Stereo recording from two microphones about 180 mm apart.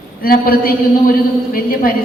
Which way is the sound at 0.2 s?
55° left (ahead or behind).